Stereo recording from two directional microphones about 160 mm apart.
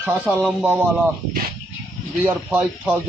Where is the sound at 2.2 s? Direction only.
10° right (ahead or behind).